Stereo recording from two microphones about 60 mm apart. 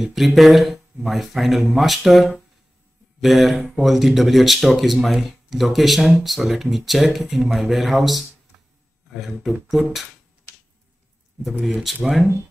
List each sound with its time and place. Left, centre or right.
0.0 s speech: centre
11.6 s speech: centre